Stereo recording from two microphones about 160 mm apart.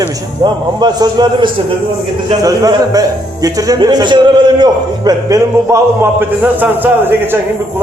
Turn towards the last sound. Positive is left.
turn(degrees=-15)  # may be behind; listen again after turning